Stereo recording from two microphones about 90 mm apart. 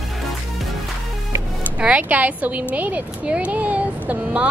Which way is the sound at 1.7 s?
15° right (ahead or behind).